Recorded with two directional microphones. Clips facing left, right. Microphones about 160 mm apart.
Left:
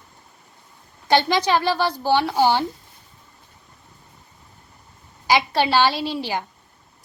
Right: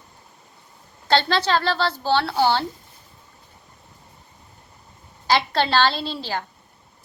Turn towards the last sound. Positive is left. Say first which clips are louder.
# left 3 dB
turn(degrees=15)  # may be behind; listen again after turning